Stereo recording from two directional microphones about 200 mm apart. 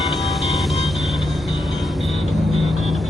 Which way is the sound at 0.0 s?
Centre (ahead or behind).